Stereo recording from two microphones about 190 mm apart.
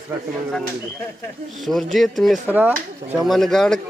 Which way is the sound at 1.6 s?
Centre (ahead or behind).